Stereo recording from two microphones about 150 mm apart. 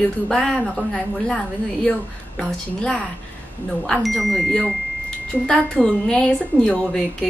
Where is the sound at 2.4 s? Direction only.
5° left (ahead or behind).